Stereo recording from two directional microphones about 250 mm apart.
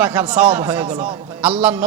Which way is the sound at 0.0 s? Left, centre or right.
Centre.